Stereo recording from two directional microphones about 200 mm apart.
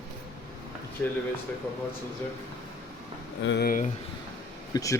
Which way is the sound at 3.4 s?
55° left (ahead or behind).